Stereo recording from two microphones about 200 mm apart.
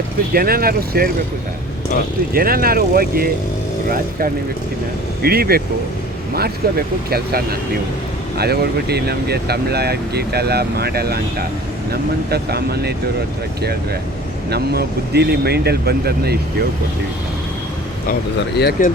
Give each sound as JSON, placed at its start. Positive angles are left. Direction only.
{"t": 0.3, "sound": "speech", "side_deg": -50}
{"t": 2.3, "sound": "speech", "side_deg": -45}
{"t": 14.5, "sound": "speech", "side_deg": -55}
{"t": 18.5, "sound": "speech", "side_deg": 55}